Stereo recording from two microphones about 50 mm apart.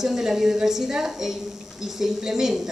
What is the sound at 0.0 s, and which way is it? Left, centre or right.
A woman's voice, centre.